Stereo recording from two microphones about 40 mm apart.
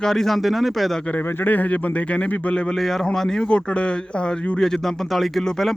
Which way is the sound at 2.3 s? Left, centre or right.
Left.